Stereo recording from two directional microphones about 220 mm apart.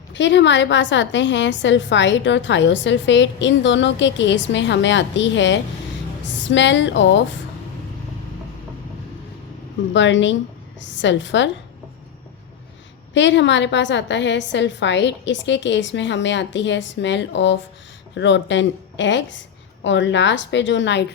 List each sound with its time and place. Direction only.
0.1 s a woman's voice: 55° left (ahead or behind)
9.9 s a woman's voice: 55° left (ahead or behind)
13.1 s a woman's voice: 55° left (ahead or behind)